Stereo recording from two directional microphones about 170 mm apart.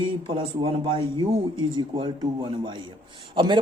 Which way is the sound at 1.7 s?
30° right (ahead or behind).